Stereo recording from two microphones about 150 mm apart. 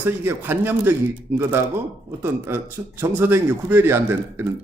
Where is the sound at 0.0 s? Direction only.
15° right (ahead or behind).